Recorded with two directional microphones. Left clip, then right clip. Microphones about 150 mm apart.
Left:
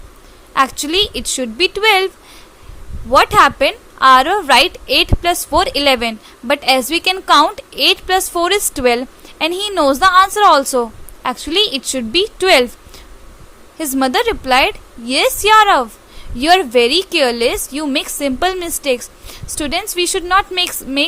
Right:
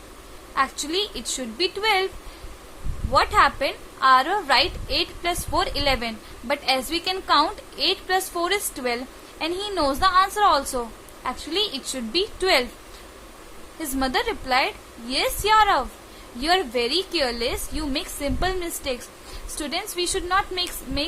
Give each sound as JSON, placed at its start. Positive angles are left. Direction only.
{"t": 0.5, "sound": "a woman's voice", "side_deg": 55}
{"t": 3.1, "sound": "a woman's voice", "side_deg": 55}
{"t": 13.7, "sound": "a woman's voice", "side_deg": 50}